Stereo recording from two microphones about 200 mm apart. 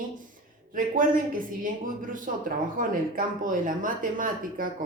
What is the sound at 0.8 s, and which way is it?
Speech, 45° right (ahead or behind).